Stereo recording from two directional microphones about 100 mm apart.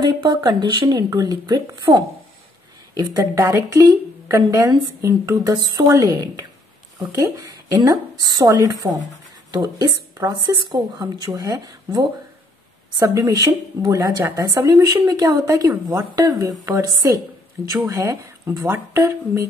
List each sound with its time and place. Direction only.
0.0 s speech: 50° right (ahead or behind)
1.9 s a woman's voice: 65° right (ahead or behind)
2.9 s a woman's voice: 35° right (ahead or behind)
8.8 s speech: 20° right (ahead or behind)
9.5 s a woman's voice: 40° right (ahead or behind)